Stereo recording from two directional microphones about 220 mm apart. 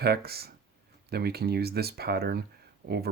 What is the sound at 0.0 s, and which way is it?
Speech, 45° right (ahead or behind).